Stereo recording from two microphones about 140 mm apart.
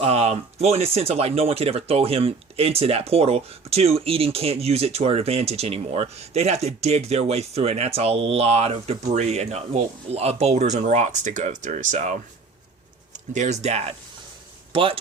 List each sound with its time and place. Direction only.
0.0 s speech: 50° right (ahead or behind)
14.7 s speech: 40° right (ahead or behind)